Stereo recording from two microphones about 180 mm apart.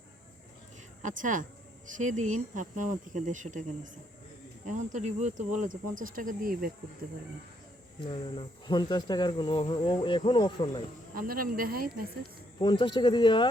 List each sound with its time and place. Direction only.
1.0 s speech: 45° right (ahead or behind)
8.0 s speech: 25° left (ahead or behind)
11.1 s speech: 55° right (ahead or behind)
12.5 s speech: 25° left (ahead or behind)